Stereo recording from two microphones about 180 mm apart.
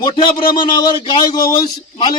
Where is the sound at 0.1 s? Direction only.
25° left (ahead or behind).